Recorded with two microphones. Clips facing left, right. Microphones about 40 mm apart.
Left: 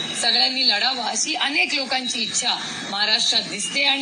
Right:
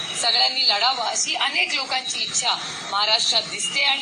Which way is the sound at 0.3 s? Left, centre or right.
Right.